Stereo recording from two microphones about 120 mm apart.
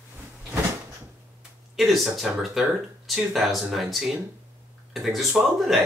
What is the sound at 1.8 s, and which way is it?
Speech, centre (ahead or behind).